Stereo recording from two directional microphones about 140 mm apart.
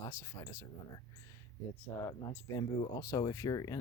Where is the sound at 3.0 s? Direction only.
25° left (ahead or behind).